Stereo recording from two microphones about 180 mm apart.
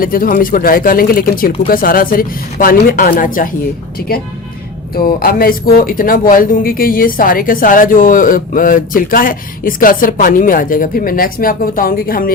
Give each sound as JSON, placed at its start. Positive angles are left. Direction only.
{"t": 0.0, "sound": "speech", "side_deg": 50}